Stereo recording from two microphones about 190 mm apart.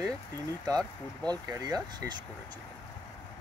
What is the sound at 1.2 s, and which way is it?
Speech, 20° right (ahead or behind).